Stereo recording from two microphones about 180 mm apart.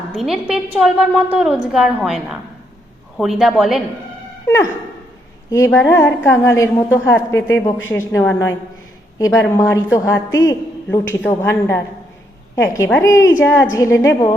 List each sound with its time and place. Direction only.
0.1 s a woman's voice: centre (ahead or behind)
4.4 s dog: 15° left (ahead or behind)
5.5 s a woman's voice: 15° left (ahead or behind)